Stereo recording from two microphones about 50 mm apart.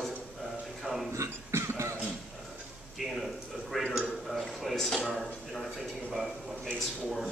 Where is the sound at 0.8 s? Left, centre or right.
Centre.